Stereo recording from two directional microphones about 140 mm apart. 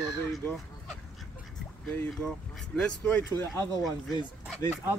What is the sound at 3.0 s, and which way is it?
Speech, 15° left (ahead or behind).